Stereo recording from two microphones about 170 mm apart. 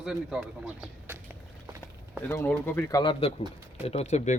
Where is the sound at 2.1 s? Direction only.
10° left (ahead or behind).